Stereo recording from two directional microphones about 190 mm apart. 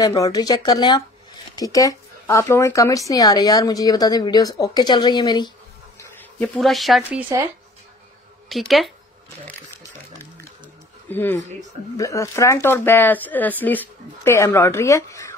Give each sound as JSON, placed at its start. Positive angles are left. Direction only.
{"t": 0.0, "sound": "speech", "side_deg": 15}
{"t": 5.9, "sound": "speech", "side_deg": 5}
{"t": 8.5, "sound": "speech", "side_deg": 0}
{"t": 11.1, "sound": "speech", "side_deg": 10}